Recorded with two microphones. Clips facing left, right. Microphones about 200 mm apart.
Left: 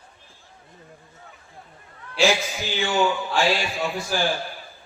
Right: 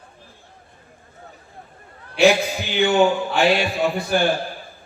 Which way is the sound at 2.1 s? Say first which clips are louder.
Right 5 dB; 60° right (ahead or behind).